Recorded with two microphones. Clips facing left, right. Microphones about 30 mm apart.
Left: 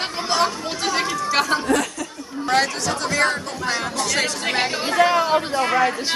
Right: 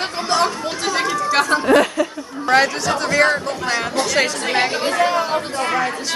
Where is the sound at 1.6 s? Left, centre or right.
Right.